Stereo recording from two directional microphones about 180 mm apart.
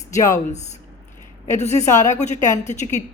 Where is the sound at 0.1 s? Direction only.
15° left (ahead or behind).